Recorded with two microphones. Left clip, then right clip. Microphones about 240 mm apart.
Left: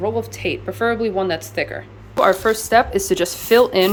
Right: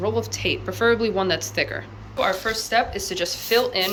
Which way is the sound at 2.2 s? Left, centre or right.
Left.